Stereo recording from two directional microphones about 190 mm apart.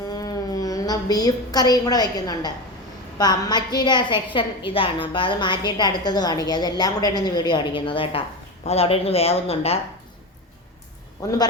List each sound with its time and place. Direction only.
0.1 s a woman's voice: 20° left (ahead or behind)
11.2 s a woman's voice: 20° left (ahead or behind)